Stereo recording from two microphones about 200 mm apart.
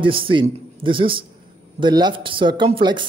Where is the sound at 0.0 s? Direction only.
25° right (ahead or behind).